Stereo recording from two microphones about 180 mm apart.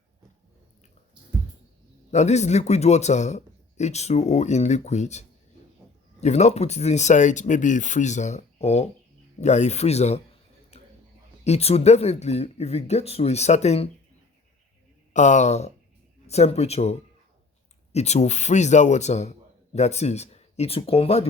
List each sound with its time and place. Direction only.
2.0 s speech: 40° left (ahead or behind)
10.7 s a sound: 35° left (ahead or behind)
11.4 s speech: 35° left (ahead or behind)
15.1 s speech: 40° left (ahead or behind)
17.9 s speech: 35° left (ahead or behind)